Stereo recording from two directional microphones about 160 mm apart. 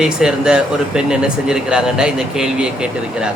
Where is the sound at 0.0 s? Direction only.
5° right (ahead or behind).